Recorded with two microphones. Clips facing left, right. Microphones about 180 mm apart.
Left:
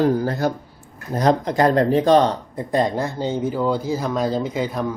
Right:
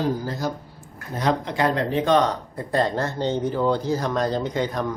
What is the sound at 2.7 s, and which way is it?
Speech, 15° left (ahead or behind).